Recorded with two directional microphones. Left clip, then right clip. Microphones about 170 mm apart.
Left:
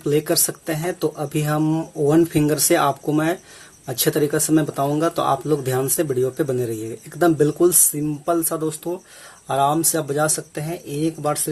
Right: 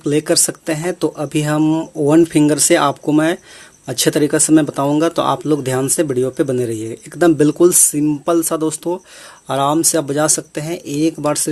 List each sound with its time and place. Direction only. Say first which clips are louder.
0.0 s speech: right 4 dB; 40° right (ahead or behind); by 11.3 s 55° right (ahead or behind)